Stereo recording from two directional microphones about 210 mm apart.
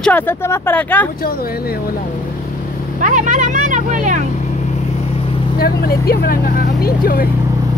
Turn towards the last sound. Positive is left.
turn(degrees=45)  # may be behind; listen again after turning